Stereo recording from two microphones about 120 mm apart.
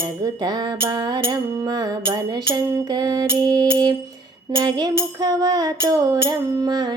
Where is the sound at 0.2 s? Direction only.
35° right (ahead or behind).